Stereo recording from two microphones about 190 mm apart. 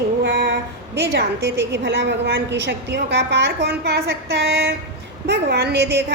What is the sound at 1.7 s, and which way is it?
A woman's voice, 65° right (ahead or behind).